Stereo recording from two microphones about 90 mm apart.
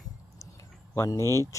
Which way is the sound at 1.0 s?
35° left (ahead or behind).